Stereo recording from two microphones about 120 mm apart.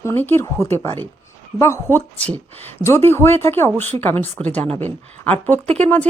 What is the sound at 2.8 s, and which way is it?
Speech, 20° left (ahead or behind).